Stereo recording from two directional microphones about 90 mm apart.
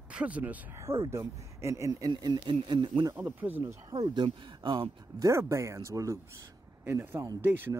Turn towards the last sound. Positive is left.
turn(degrees=-25)  # may be behind; listen again after turning